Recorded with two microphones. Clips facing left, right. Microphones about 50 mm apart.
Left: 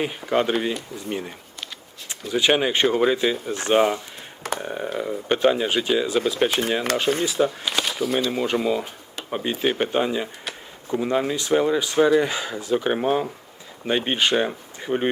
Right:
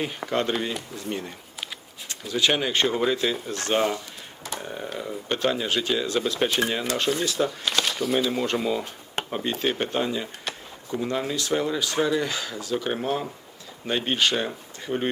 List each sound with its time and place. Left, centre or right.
0.0 s speech: centre